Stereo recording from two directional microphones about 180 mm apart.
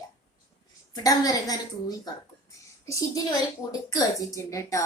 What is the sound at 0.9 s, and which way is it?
A woman's voice, 20° left (ahead or behind).